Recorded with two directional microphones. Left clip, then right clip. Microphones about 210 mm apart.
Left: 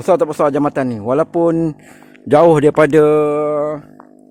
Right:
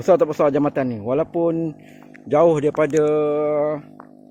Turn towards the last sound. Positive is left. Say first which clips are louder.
# left 3 dB
turn(degrees=25)  # may be behind; listen again after turning